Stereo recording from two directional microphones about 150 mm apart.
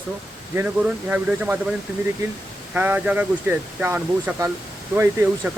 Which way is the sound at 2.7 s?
10° right (ahead or behind).